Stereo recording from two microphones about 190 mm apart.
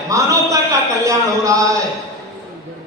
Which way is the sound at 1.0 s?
15° right (ahead or behind).